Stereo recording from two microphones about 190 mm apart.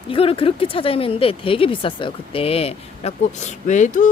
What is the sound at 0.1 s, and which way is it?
Speech, 30° left (ahead or behind).